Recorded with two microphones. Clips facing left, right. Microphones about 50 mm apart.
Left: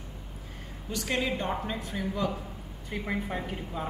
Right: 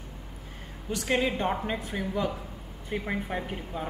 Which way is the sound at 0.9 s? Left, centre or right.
Centre.